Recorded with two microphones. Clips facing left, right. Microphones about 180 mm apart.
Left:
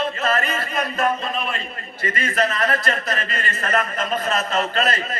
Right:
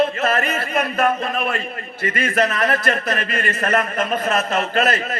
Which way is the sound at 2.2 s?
50° right (ahead or behind).